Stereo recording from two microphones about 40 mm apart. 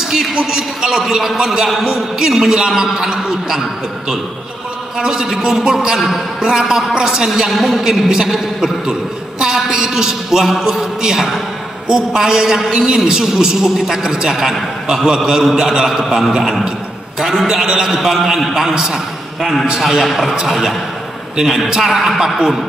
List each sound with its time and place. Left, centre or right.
0.1 s a woman's voice: centre
1.0 s a man's voice: centre
1.4 s a woman's voice: centre
4.9 s a woman's voice: centre
9.4 s a sound: centre
10.5 s a woman's voice: centre
14.0 s a woman's voice: centre
14.3 s a woman's voice: centre
21.8 s a man's voice: centre